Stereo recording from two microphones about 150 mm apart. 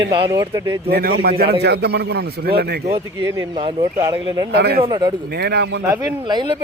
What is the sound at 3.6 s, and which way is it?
Speech, 35° right (ahead or behind).